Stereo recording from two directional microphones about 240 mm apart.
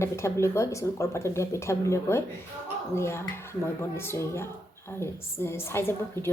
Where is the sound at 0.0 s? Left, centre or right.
Centre.